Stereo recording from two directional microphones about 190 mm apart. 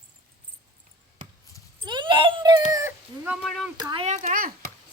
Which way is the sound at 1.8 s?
25° right (ahead or behind).